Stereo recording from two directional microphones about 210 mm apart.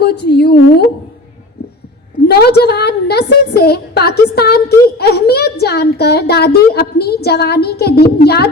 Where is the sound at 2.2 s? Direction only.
50° left (ahead or behind).